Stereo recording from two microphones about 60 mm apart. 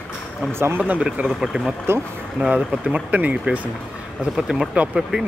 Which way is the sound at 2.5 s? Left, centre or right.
Right.